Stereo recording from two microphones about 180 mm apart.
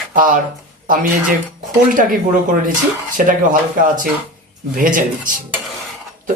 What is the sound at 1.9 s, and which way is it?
Speech, 50° right (ahead or behind).